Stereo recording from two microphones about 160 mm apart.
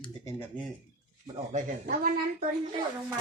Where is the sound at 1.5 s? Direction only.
60° right (ahead or behind).